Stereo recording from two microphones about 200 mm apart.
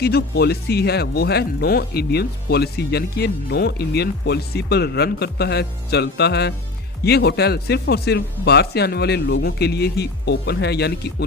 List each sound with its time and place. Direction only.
0.0 s speech: 55° left (ahead or behind)